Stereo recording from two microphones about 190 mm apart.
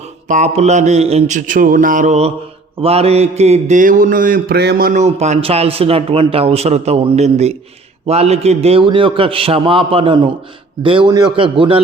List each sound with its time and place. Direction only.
0.3 s mantra: 40° right (ahead or behind)
8.0 s a man's voice: 35° right (ahead or behind)